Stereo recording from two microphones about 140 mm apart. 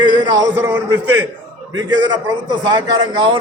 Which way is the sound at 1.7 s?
30° right (ahead or behind).